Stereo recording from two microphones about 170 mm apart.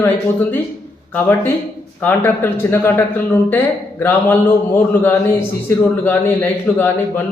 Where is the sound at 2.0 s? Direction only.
10° left (ahead or behind).